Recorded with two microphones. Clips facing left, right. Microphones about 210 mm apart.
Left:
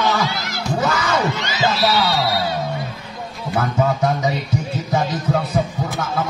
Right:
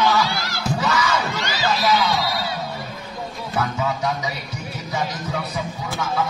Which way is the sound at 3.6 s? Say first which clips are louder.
Left 5 dB; 50° left (ahead or behind).